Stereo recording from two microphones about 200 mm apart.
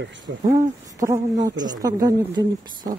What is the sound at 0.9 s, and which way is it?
A woman's voice, 15° right (ahead or behind).